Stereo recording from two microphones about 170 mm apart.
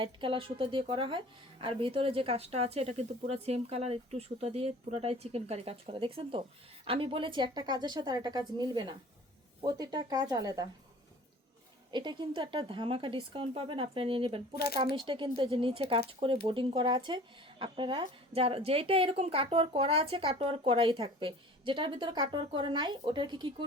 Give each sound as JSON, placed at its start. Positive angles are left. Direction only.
{"t": 0.0, "sound": "a woman's voice", "side_deg": -30}
{"t": 11.9, "sound": "a woman's voice", "side_deg": -25}
{"t": 14.5, "sound": "speech", "side_deg": 65}
{"t": 14.8, "sound": "a woman's voice", "side_deg": -30}